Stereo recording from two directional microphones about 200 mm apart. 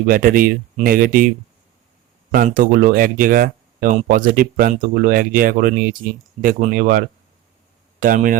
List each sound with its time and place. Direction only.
0.1 s speech: 45° right (ahead or behind)
2.3 s speech: 45° right (ahead or behind)